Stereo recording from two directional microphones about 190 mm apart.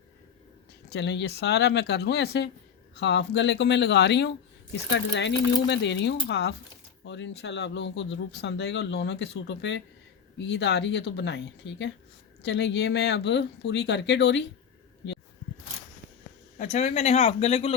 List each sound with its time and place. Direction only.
0.9 s speech: 65° left (ahead or behind)
7.0 s speech: 75° left (ahead or behind)
16.6 s speech: 35° left (ahead or behind)